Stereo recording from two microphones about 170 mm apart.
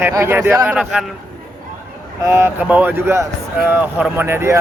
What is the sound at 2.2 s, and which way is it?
A man's voice, 15° right (ahead or behind).